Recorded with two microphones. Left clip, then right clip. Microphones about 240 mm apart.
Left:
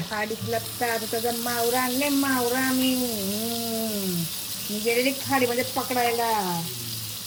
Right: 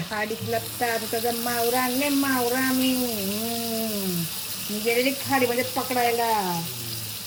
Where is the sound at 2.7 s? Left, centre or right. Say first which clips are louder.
Even; left.